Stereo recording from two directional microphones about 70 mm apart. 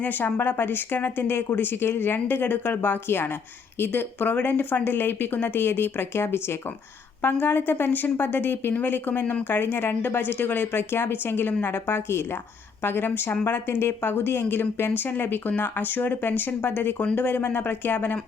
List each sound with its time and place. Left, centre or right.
0.0 s a woman's voice: left